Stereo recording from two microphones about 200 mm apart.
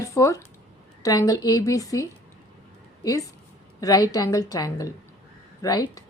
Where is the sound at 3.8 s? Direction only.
15° left (ahead or behind).